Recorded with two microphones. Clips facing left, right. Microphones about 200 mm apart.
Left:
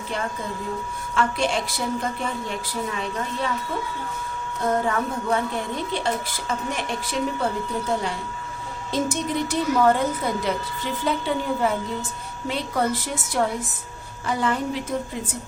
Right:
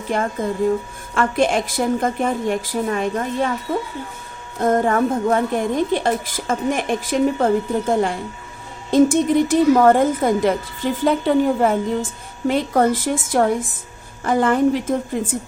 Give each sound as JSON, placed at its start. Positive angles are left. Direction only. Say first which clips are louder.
{"t": 0.1, "sound": "a woman's voice", "louder": "right 8 dB", "side_deg": -50}
{"t": 4.6, "sound": "a woman's voice", "louder": "right 7 dB", "side_deg": -50}